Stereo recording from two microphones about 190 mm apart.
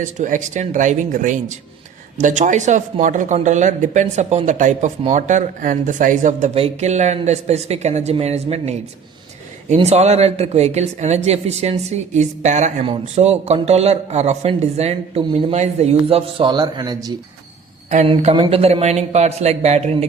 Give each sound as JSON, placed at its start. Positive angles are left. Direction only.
{"t": 0.0, "sound": "speech", "side_deg": -40}
{"t": 17.9, "sound": "speech", "side_deg": -35}